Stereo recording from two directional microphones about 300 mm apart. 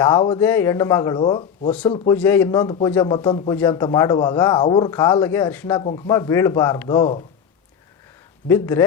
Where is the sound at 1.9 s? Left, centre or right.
Centre.